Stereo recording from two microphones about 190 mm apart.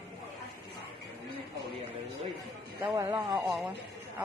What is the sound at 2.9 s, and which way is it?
Speech, 15° right (ahead or behind).